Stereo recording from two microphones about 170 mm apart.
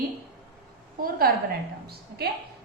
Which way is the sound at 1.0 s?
60° right (ahead or behind).